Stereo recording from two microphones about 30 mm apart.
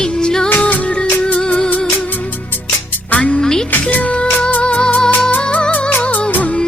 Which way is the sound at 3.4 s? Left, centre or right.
Centre.